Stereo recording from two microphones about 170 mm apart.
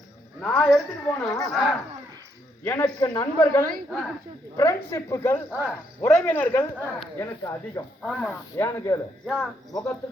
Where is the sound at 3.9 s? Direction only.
Centre (ahead or behind).